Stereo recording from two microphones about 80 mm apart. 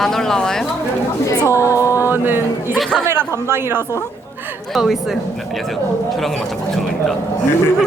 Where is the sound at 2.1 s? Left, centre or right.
Right.